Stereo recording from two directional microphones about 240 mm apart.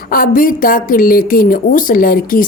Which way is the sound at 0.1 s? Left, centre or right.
Left.